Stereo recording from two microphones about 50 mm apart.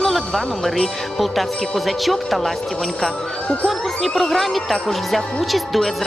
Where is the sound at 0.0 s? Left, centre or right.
Centre.